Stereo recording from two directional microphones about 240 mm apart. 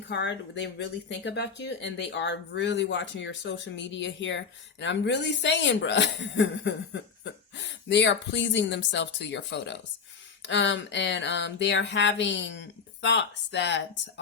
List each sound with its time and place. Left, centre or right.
0.1 s speech: left